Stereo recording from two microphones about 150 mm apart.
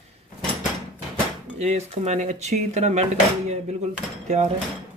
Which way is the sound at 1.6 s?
45° right (ahead or behind).